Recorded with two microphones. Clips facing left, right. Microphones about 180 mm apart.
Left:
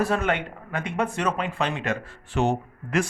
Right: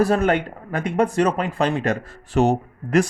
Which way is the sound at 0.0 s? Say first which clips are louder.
Right 6 dB; 40° right (ahead or behind).